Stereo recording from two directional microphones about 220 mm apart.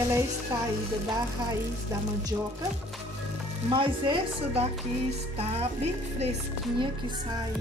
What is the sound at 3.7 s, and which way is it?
Speech, 20° right (ahead or behind).